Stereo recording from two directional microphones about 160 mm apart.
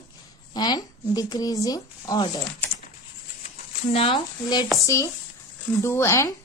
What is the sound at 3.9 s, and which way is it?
Speech, 30° left (ahead or behind).